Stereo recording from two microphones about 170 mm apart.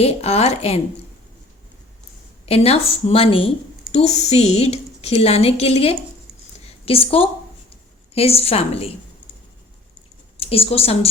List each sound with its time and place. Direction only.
0.0 s a woman's voice: 35° left (ahead or behind)
2.5 s a woman's voice: 35° left (ahead or behind)
10.3 s speech: 35° left (ahead or behind)